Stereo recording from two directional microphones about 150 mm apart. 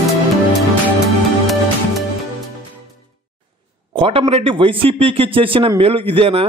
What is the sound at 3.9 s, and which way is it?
A man's voice, 40° right (ahead or behind).